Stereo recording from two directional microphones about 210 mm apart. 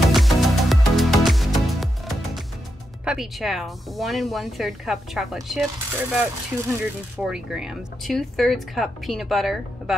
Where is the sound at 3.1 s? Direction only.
Centre (ahead or behind).